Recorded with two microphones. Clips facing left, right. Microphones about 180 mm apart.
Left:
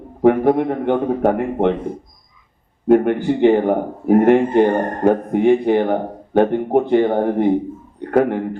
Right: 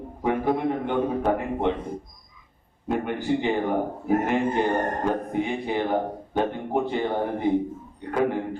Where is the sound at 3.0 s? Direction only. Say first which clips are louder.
Left 10 dB; 60° left (ahead or behind).